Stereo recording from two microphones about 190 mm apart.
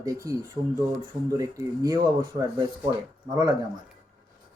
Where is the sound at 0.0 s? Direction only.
15° right (ahead or behind).